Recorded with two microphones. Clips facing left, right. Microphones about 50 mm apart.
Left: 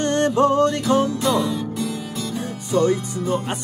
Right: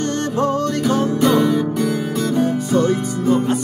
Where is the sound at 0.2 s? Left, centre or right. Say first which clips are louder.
Left 5 dB; left.